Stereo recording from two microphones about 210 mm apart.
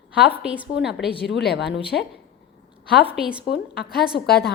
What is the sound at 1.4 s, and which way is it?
Speech, 55° left (ahead or behind).